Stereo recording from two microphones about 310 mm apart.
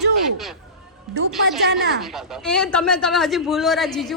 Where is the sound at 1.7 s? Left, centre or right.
Right.